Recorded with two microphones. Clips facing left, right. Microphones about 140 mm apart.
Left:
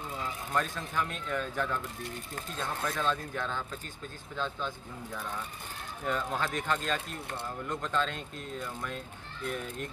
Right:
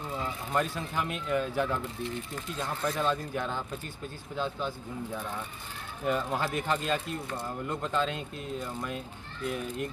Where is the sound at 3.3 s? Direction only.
15° right (ahead or behind).